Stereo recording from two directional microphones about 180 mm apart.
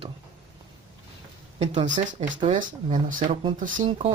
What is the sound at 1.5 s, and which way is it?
Speech, 35° right (ahead or behind).